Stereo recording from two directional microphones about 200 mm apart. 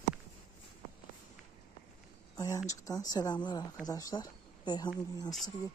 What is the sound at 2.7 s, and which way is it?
Speech, 15° left (ahead or behind).